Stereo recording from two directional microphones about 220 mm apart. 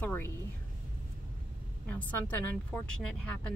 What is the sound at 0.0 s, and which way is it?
Speech, 10° left (ahead or behind).